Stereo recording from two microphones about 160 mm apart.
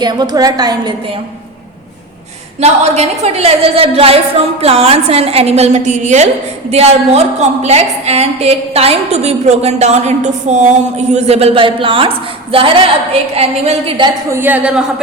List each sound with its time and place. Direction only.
0.0 s a woman's voice: 25° right (ahead or behind)
2.6 s a woman's voice: 40° right (ahead or behind)
14.3 s a woman's voice: 15° right (ahead or behind)